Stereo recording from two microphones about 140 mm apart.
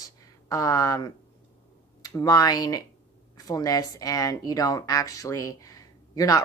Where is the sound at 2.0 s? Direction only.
25° left (ahead or behind).